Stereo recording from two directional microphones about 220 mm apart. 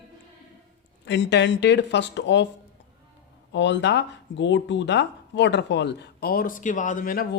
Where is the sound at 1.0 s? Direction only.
55° left (ahead or behind).